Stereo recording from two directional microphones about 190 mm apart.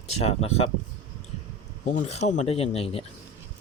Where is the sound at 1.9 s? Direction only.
35° left (ahead or behind).